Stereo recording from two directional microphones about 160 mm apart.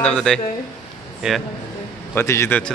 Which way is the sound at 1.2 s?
5° right (ahead or behind).